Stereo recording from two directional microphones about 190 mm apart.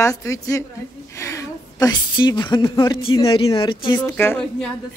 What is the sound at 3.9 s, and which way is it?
Speech, 10° left (ahead or behind).